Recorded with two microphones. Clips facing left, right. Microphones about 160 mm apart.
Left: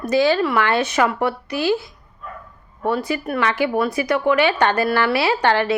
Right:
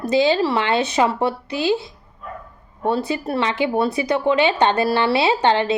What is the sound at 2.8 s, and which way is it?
Speech, 20° right (ahead or behind).